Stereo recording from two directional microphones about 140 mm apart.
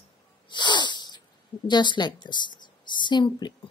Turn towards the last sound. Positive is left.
turn(degrees=30)  # may be behind; listen again after turning